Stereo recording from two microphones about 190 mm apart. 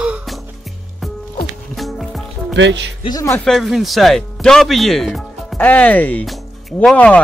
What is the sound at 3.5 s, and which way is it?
Speech, centre (ahead or behind).